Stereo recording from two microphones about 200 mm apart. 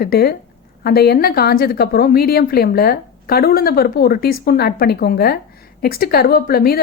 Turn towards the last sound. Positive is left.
turn(degrees=50)  # may be behind; listen again after turning